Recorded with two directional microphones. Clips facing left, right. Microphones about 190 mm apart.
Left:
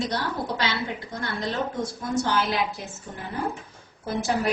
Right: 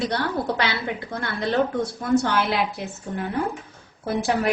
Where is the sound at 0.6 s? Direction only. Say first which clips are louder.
Right 2 dB; 60° right (ahead or behind).